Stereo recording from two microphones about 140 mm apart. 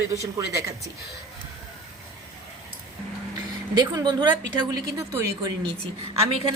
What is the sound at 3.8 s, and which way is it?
Speech, 30° right (ahead or behind).